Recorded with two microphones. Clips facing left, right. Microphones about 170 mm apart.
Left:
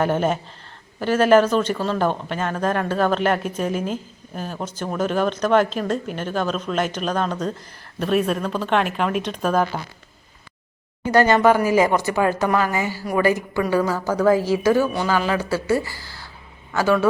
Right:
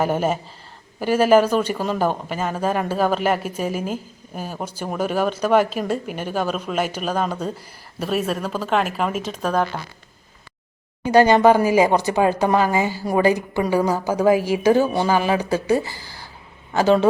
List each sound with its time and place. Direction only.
0.0 s speech: 5° right (ahead or behind)
11.0 s speech: 15° right (ahead or behind)